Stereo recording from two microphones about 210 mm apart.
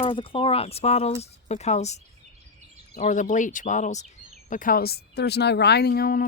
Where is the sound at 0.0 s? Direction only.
25° left (ahead or behind).